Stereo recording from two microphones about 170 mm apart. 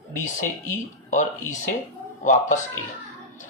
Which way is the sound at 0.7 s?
45° left (ahead or behind).